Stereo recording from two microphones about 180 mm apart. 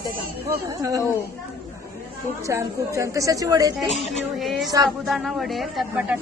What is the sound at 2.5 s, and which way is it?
A woman's voice, 15° right (ahead or behind).